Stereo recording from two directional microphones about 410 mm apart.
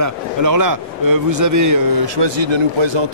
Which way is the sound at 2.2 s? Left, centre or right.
Right.